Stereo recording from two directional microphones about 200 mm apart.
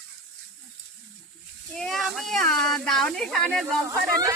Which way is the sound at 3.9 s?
15° right (ahead or behind).